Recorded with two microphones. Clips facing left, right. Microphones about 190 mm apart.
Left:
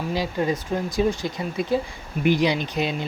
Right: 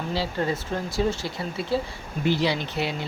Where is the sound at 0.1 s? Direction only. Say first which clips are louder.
Left 2 dB; 15° left (ahead or behind).